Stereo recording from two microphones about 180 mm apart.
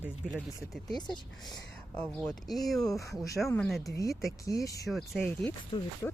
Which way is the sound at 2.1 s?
Centre (ahead or behind).